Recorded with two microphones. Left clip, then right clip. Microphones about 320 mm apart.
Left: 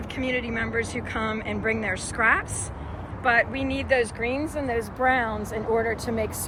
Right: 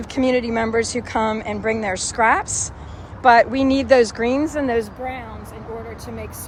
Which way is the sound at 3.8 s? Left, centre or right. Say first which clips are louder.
Right 8 dB; right.